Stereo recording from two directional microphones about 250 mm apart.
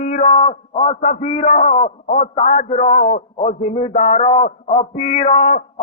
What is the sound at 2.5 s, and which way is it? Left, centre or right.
Speech, left.